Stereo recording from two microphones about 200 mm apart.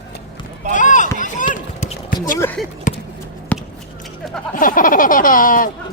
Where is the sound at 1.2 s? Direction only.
40° left (ahead or behind).